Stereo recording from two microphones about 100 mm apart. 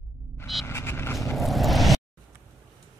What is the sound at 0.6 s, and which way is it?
Vehicle, 25° left (ahead or behind).